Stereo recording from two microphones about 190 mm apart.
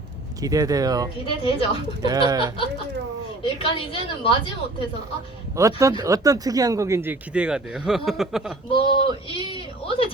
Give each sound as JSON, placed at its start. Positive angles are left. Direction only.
{"t": 0.4, "sound": "speech", "side_deg": -20}
{"t": 1.2, "sound": "a woman's voice", "side_deg": 30}
{"t": 1.7, "sound": "speech", "side_deg": -20}
{"t": 3.4, "sound": "a woman's voice", "side_deg": 30}
{"t": 5.5, "sound": "speech", "side_deg": -15}
{"t": 8.7, "sound": "speech", "side_deg": 25}